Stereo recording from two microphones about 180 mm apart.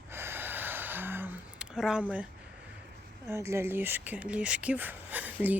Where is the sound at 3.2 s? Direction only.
15° right (ahead or behind).